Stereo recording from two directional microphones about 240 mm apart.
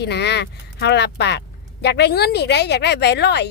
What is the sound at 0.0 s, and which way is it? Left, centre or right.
Speech, left.